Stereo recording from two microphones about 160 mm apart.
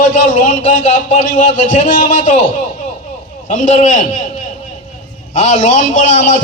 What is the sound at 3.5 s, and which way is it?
Speech, 50° left (ahead or behind).